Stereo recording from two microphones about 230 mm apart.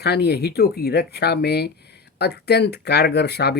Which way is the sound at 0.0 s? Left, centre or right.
Left.